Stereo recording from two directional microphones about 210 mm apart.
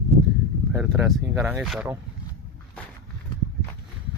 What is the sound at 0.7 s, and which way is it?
Speech, 5° right (ahead or behind).